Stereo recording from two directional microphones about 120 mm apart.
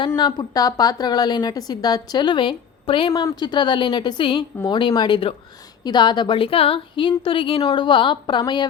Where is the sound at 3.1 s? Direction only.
30° left (ahead or behind).